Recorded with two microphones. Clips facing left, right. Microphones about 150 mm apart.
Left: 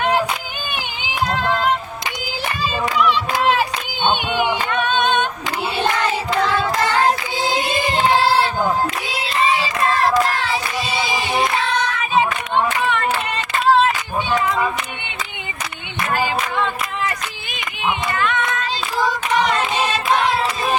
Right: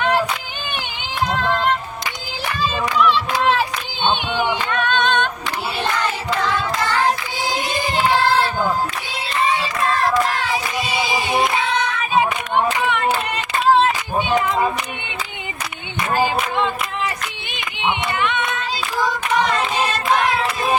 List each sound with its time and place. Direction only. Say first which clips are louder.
1.3 s child singing: even; centre (ahead or behind)
2.6 s a sound: right 1 dB; 10° left (ahead or behind)
4.0 s singing: left 1 dB; 10° left (ahead or behind)
4.7 s a capella: left 1 dB; 10° left (ahead or behind)
9.4 s music: left 1 dB; centre (ahead or behind)
10.2 s child singing: left 1 dB; centre (ahead or behind)
10.4 s singing: even; 10° right (ahead or behind)
14.3 s a sound: even; 15° right (ahead or behind)
18.1 s singing: left 1 dB; 20° right (ahead or behind)
19.0 s singing: left 1 dB; 5° left (ahead or behind)
19.8 s carnatic music: even; centre (ahead or behind)